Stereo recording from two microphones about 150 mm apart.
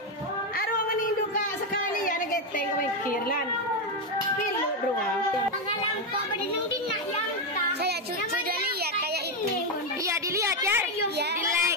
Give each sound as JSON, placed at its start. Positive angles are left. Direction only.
{"t": 10.0, "sound": "a woman's voice", "side_deg": -20}